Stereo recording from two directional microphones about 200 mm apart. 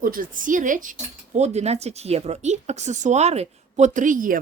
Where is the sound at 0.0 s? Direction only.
45° right (ahead or behind).